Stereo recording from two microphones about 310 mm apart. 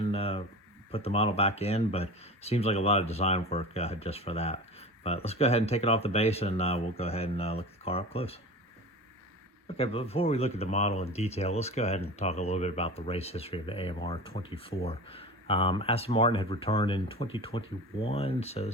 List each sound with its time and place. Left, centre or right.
0.0 s a sound: centre
0.9 s speech: centre
9.6 s speech: centre